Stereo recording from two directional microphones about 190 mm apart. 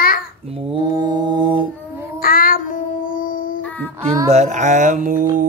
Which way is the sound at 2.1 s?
50° left (ahead or behind).